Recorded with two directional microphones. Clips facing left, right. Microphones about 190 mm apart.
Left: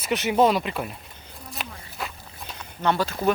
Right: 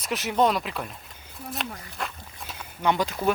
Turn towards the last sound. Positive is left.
turn(degrees=-15)  # may be behind; listen again after turning